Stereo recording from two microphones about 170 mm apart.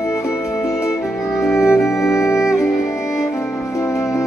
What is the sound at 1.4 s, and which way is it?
Music, 15° left (ahead or behind).